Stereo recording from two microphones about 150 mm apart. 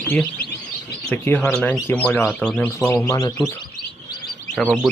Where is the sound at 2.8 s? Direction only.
20° left (ahead or behind).